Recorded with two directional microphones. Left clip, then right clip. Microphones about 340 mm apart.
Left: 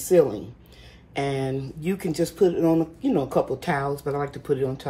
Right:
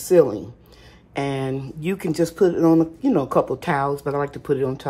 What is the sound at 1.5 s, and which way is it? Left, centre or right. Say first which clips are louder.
Speech: right 2 dB; right.